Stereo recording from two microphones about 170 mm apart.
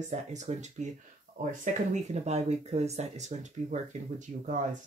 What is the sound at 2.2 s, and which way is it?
Speech, 40° right (ahead or behind).